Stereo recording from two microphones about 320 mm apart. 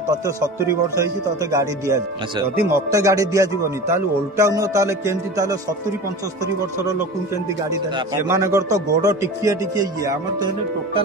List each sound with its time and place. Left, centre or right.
0.1 s speech: centre
8.2 s speech: centre